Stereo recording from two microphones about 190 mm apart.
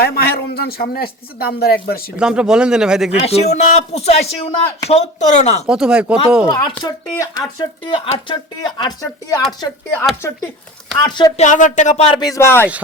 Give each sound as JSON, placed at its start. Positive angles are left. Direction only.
{"t": 0.0, "sound": "speech", "side_deg": 55}
{"t": 2.1, "sound": "speech", "side_deg": -5}
{"t": 3.2, "sound": "speech", "side_deg": 35}
{"t": 5.6, "sound": "speech", "side_deg": -5}
{"t": 6.5, "sound": "speech", "side_deg": 25}
{"t": 10.9, "sound": "speech", "side_deg": 20}
{"t": 11.4, "sound": "speech", "side_deg": 40}